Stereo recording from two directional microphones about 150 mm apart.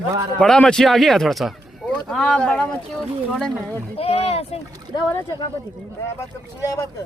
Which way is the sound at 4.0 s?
40° left (ahead or behind).